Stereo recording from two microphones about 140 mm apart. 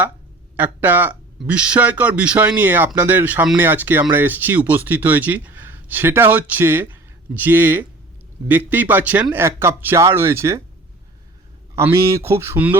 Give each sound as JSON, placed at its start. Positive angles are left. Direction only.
{"t": 0.5, "sound": "a man's voice", "side_deg": -15}
{"t": 11.7, "sound": "a man's voice", "side_deg": -20}